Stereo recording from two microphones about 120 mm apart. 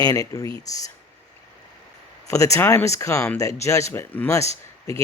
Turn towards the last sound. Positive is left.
turn(degrees=25)  # may be behind; listen again after turning